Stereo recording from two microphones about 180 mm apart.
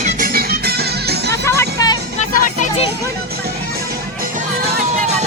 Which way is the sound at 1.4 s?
15° left (ahead or behind).